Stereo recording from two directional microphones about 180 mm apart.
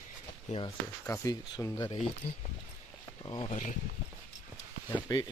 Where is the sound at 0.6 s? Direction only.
15° left (ahead or behind).